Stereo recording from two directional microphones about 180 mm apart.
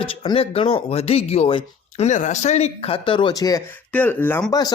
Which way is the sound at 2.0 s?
40° left (ahead or behind).